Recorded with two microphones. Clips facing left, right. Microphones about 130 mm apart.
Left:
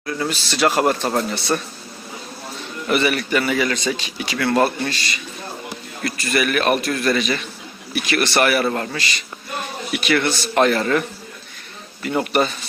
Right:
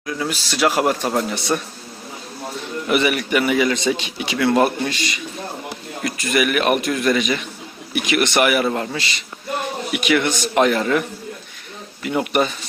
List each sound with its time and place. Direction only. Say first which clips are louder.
0.0 s speech: left 1 dB; 10° right (ahead or behind)
2.9 s speech: right 1 dB; 15° right (ahead or behind)
12.0 s speech: even; 10° right (ahead or behind)